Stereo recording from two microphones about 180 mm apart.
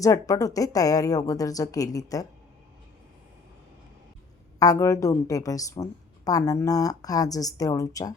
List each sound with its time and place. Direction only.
0.0 s a woman's voice: 20° left (ahead or behind)
4.6 s a woman's voice: 20° left (ahead or behind)